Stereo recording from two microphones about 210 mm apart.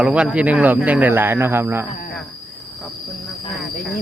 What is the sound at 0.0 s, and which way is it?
Speech, 5° right (ahead or behind).